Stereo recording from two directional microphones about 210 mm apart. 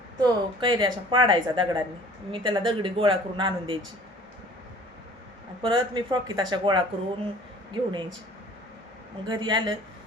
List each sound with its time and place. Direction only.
0.2 s speech: 20° right (ahead or behind)
5.6 s speech: 20° right (ahead or behind)
9.2 s speech: 20° right (ahead or behind)